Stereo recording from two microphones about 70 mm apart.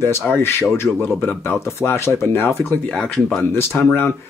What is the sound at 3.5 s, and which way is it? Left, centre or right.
Speech, left.